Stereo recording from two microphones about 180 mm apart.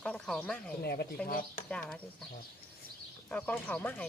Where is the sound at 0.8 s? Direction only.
60° left (ahead or behind).